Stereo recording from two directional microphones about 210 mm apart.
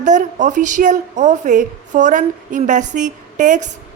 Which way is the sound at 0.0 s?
35° right (ahead or behind).